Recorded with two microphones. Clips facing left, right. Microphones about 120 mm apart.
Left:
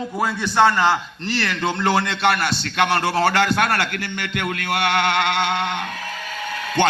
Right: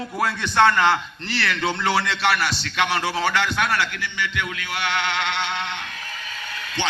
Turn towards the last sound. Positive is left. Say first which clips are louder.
# left 8 dB
turn(degrees=50)  # may be behind; listen again after turning